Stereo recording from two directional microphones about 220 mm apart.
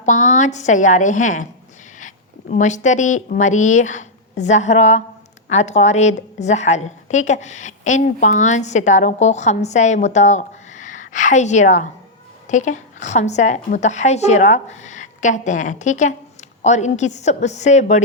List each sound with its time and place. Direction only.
0.0 s a woman's voice: 35° left (ahead or behind)